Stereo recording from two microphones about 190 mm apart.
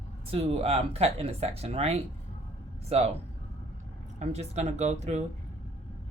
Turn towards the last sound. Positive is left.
turn(degrees=-35)  # may be behind; listen again after turning